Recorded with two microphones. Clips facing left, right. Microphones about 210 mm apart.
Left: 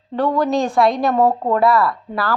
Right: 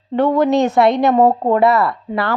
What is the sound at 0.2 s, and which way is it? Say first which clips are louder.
A woman's voice: right 4 dB; 20° right (ahead or behind).